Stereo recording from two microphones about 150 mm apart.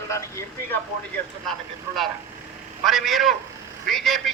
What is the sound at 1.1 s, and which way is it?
Speech, centre (ahead or behind).